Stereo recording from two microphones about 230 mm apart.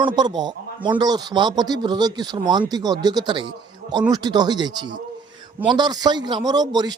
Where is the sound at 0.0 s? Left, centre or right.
Centre.